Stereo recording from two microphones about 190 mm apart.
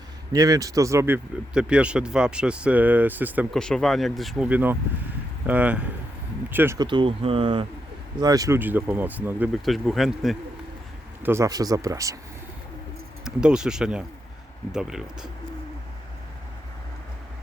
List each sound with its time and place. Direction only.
0.3 s speech: 20° right (ahead or behind)
3.5 s speech: 5° left (ahead or behind)
6.7 s speech: 25° right (ahead or behind); by 10.3 s centre (ahead or behind)
11.2 s speech: 15° right (ahead or behind)
13.2 s speech: 5° right (ahead or behind)